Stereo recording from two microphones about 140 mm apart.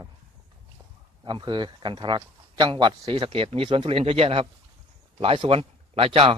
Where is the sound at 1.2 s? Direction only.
35° right (ahead or behind).